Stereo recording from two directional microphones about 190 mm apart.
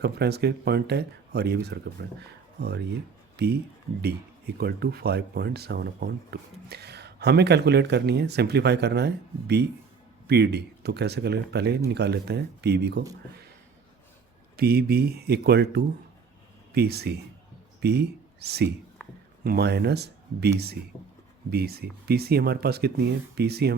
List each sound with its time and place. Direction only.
0.0 s speech: 60° right (ahead or behind)
14.5 s speech: 55° right (ahead or behind)
21.5 s speech: 55° right (ahead or behind)